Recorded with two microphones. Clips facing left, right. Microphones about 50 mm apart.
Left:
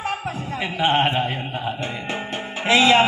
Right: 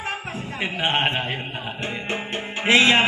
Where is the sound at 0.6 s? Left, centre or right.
Right.